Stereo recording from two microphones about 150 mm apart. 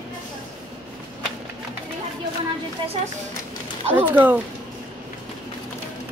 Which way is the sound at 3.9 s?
10° right (ahead or behind).